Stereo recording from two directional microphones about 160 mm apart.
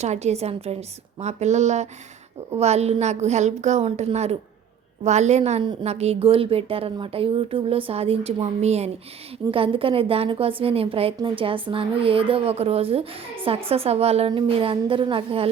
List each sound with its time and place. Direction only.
0.0 s a woman's voice: 45° right (ahead or behind)